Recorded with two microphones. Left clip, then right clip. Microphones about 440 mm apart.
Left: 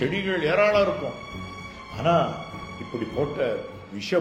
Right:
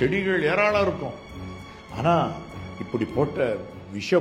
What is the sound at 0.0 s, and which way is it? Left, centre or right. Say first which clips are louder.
Speech: right 2 dB; right.